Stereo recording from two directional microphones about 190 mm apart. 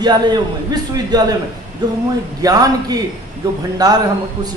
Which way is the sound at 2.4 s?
20° right (ahead or behind).